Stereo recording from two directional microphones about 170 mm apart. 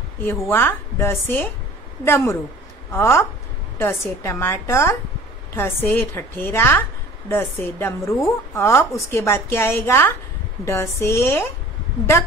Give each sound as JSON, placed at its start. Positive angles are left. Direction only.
{"t": 0.5, "sound": "a woman's voice", "side_deg": 15}